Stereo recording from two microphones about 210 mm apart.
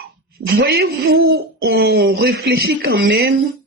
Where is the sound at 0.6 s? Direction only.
50° right (ahead or behind).